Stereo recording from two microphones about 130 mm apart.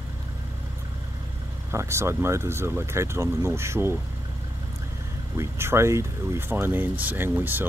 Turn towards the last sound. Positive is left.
turn(degrees=-15)  # may be behind; listen again after turning